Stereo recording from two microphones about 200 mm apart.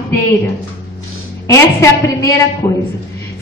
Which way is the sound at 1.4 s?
15° left (ahead or behind).